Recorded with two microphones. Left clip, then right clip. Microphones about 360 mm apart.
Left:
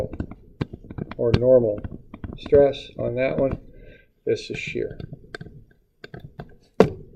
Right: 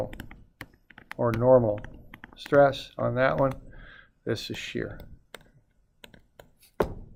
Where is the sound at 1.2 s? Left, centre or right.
Right.